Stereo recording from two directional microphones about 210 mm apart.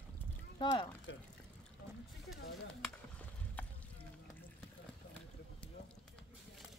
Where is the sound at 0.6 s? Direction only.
20° left (ahead or behind).